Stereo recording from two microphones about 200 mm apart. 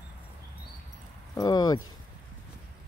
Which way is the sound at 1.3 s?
20° left (ahead or behind).